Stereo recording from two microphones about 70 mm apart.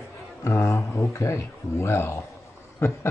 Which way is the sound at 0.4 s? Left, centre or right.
Left.